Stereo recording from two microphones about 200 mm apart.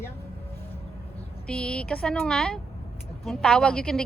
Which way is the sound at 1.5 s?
5° left (ahead or behind).